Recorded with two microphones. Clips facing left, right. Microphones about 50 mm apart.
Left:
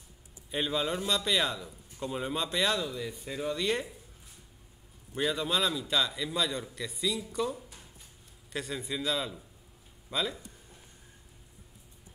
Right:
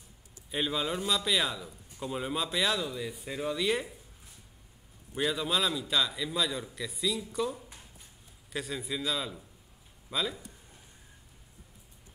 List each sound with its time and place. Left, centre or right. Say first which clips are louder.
0.5 s a man's voice: left 1 dB; centre
5.1 s a man's voice: even; centre